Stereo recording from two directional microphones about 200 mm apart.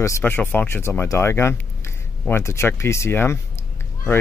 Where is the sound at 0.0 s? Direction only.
10° left (ahead or behind).